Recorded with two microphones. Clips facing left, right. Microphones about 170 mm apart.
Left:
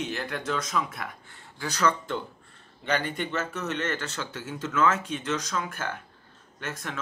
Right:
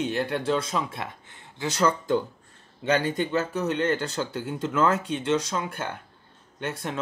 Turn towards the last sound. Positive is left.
turn(degrees=-30)  # may be behind; listen again after turning